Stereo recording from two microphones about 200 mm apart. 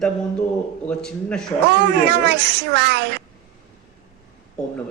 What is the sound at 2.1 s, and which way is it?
Speech, 55° right (ahead or behind).